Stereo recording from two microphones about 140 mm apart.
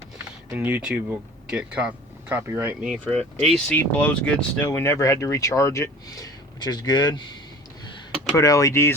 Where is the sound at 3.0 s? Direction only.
5° left (ahead or behind); by 7.2 s 30° left (ahead or behind).